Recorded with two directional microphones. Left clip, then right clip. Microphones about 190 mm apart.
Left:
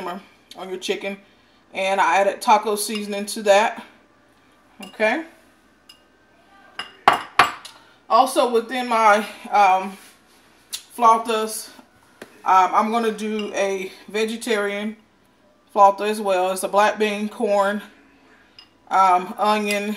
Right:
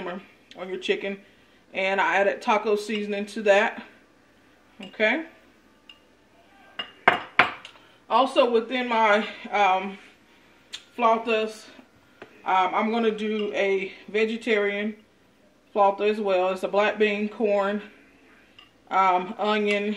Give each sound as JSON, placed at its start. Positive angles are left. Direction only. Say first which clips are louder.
{"t": 0.5, "sound": "speech", "louder": "left 1 dB", "side_deg": 10}
{"t": 8.2, "sound": "speech", "louder": "left 2 dB", "side_deg": 30}
{"t": 8.9, "sound": "speech", "louder": "left 5 dB", "side_deg": 5}
{"t": 11.0, "sound": "speech", "louder": "left 5 dB", "side_deg": 15}
{"t": 18.9, "sound": "speech", "louder": "left 5 dB", "side_deg": 15}